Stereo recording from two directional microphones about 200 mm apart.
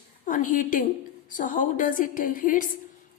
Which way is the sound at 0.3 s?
40° left (ahead or behind).